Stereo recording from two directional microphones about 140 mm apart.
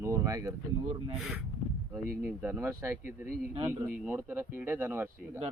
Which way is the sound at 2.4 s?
15° right (ahead or behind).